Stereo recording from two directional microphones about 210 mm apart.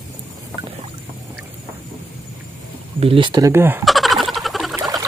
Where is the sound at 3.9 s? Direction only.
Centre (ahead or behind).